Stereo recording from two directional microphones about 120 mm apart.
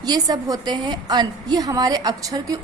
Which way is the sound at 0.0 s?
35° right (ahead or behind).